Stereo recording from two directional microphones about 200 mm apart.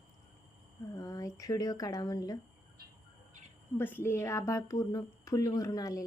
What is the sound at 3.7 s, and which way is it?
A woman's voice, 10° left (ahead or behind).